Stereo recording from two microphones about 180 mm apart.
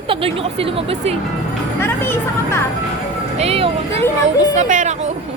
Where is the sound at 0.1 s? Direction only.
30° right (ahead or behind).